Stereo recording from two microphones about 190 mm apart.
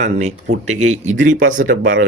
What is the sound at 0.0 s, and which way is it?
Speech, 35° right (ahead or behind).